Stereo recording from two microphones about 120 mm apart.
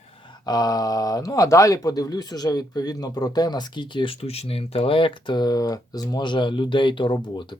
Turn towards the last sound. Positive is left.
turn(degrees=40)  # may be behind; listen again after turning